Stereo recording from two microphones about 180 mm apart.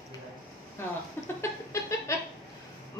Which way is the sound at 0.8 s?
15° left (ahead or behind).